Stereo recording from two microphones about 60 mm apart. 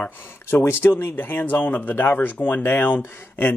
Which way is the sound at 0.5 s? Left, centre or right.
Left.